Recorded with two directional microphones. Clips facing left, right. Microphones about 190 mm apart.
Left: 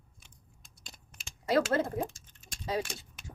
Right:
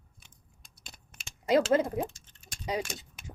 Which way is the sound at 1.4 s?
15° right (ahead or behind).